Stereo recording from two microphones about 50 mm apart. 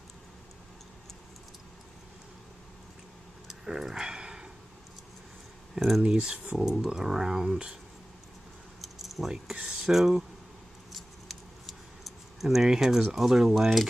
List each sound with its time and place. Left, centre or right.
3.4 s a sound: centre
5.8 s speech: centre
6.0 s speech: centre
8.8 s keys jangling: centre
9.3 s speech: centre
10.9 s keys jangling: centre
13.1 s speech: centre